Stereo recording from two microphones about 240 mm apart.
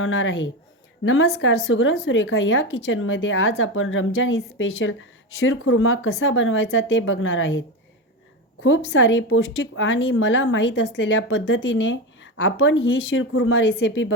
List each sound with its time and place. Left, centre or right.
0.0 s a woman's voice: left
8.6 s a woman's voice: left